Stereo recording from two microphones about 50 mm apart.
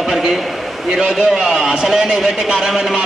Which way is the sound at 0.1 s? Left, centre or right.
Centre.